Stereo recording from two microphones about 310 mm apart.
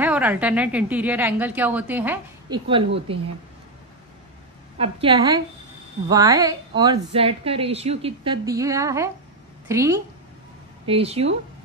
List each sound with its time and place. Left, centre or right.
0.0 s a woman's voice: centre
3.1 s a woman's voice: centre
4.7 s a woman's voice: centre